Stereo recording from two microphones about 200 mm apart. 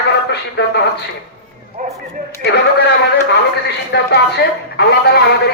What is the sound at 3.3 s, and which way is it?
A man's voice, 60° left (ahead or behind).